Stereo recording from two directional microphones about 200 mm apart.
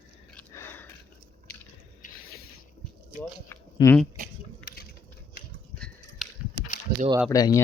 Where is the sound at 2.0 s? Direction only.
50° left (ahead or behind).